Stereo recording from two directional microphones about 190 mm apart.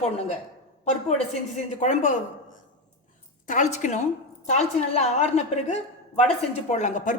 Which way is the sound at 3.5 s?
40° left (ahead or behind).